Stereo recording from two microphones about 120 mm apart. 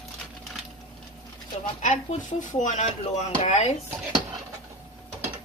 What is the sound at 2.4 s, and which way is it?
Speech, 90° left.